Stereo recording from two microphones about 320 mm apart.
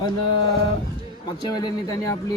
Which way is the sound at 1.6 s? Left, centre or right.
Centre.